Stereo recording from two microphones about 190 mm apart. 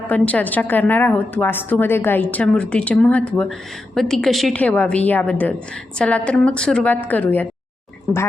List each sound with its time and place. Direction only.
0.1 s a woman's voice: 10° left (ahead or behind)